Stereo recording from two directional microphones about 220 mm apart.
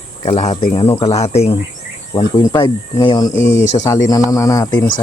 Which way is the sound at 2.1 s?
20° left (ahead or behind).